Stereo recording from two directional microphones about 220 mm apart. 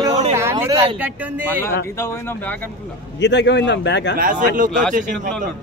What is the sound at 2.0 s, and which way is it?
Speech, 10° left (ahead or behind).